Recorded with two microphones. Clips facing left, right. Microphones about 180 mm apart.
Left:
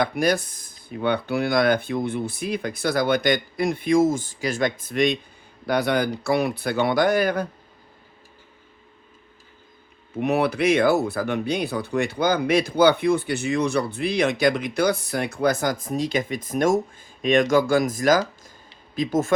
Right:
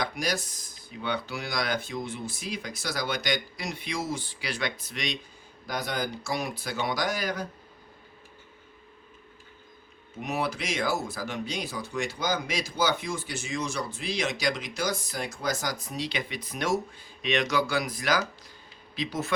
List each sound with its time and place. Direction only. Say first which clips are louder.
0.0 s speech: left 9 dB; 55° left (ahead or behind)
5.6 s speech: left 10 dB; 65° left (ahead or behind)
10.2 s speech: left 10 dB; 60° left (ahead or behind)